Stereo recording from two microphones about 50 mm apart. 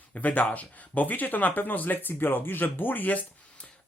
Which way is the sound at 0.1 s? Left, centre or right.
Left.